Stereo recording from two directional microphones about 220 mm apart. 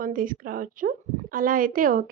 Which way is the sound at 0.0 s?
40° right (ahead or behind).